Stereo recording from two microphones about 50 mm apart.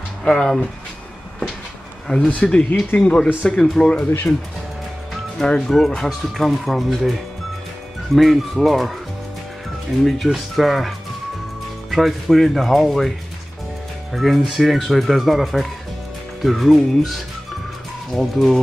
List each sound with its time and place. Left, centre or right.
0.2 s speech: centre
2.1 s speech: left
2.9 s speech: left
3.4 s speech: centre
5.4 s speech: centre
8.1 s speech: centre
14.1 s speech: centre